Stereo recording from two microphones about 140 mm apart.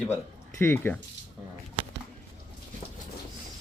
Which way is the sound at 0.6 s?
15° left (ahead or behind).